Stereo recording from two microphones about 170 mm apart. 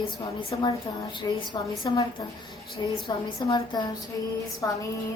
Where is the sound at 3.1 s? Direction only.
30° left (ahead or behind).